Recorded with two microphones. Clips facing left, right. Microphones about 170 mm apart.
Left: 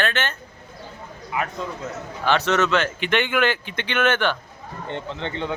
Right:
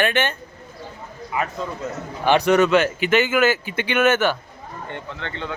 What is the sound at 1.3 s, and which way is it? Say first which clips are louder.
Speech: right 2 dB; centre (ahead or behind).